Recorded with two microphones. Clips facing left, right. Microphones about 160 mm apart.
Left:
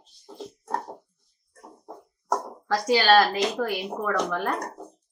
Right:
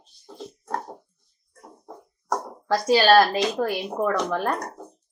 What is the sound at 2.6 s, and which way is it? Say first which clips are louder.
A woman's voice: right 3 dB; 30° right (ahead or behind).